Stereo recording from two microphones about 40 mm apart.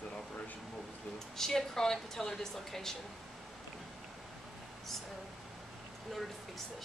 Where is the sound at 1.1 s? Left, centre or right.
Centre.